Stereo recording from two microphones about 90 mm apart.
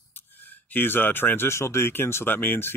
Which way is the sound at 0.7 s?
20° left (ahead or behind).